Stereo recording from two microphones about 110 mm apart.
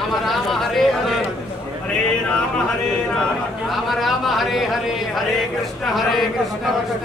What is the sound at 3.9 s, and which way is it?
Speech, centre (ahead or behind).